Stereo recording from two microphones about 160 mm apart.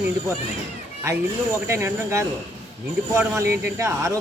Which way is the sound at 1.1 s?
15° right (ahead or behind).